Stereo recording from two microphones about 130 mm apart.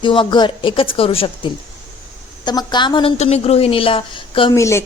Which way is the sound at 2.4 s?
30° left (ahead or behind).